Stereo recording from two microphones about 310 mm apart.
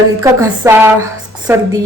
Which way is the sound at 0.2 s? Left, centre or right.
Centre.